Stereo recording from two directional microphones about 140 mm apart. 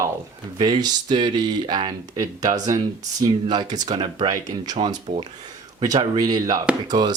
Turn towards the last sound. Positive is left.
turn(degrees=-30)  # may be behind; listen again after turning